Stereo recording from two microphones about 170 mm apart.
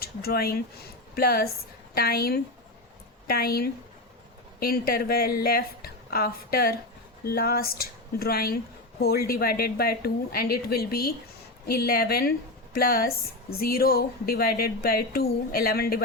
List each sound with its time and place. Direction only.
0.0 s a woman's voice: 65° left (ahead or behind)